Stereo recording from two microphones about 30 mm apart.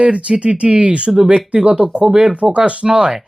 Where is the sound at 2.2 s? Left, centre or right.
Right.